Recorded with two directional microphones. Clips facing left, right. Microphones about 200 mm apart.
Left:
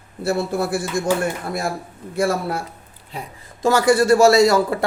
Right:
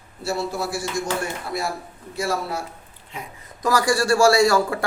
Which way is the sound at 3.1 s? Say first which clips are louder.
Left 3 dB; 35° left (ahead or behind).